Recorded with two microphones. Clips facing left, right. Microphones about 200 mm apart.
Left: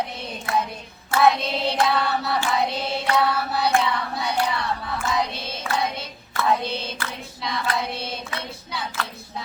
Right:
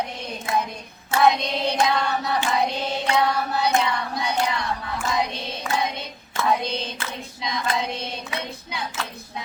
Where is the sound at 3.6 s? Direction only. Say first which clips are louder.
Left 1 dB; 15° right (ahead or behind).